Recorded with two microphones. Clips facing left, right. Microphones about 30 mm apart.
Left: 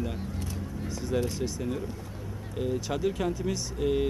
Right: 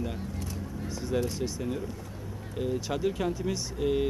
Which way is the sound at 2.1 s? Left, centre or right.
Centre.